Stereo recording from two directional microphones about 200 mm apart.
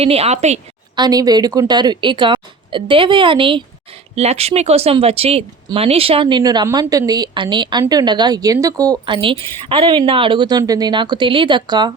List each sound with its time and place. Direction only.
0.0 s a woman's voice: 30° right (ahead or behind)
0.9 s speech: 20° right (ahead or behind)